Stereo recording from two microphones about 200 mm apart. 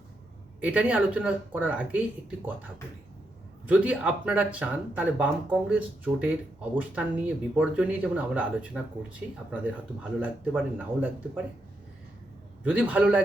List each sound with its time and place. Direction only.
0.6 s speech: 5° right (ahead or behind)
3.7 s speech: 5° right (ahead or behind)
12.6 s speech: 5° right (ahead or behind)